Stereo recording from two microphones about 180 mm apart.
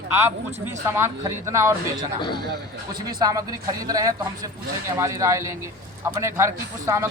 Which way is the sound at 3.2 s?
20° right (ahead or behind).